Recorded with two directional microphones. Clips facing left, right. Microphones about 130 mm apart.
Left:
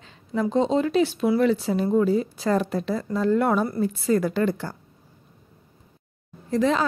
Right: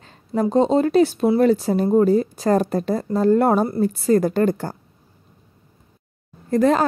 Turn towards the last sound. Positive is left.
turn(degrees=-50)  # may be behind; listen again after turning